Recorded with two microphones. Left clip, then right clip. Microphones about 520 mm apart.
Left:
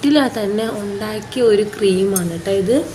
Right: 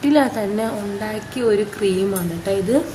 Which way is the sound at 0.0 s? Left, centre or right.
Right.